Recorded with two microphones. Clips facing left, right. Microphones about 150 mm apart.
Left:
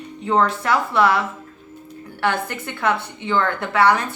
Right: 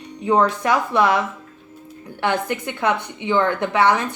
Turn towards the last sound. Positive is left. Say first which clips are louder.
# even
turn(degrees=-20)  # may be behind; listen again after turning